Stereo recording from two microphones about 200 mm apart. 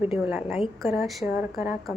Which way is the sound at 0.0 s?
5° right (ahead or behind).